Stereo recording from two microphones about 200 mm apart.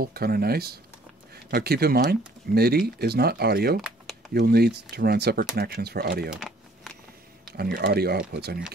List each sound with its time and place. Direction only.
0.0 s speech: 50° right (ahead or behind)
6.3 s a sound: centre (ahead or behind)
7.5 s speech: 50° right (ahead or behind)